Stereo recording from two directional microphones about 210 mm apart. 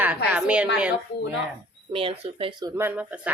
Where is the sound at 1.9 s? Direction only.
25° right (ahead or behind).